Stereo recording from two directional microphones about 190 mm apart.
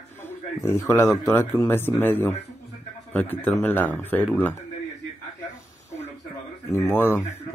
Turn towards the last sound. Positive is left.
turn(degrees=10)  # may be behind; listen again after turning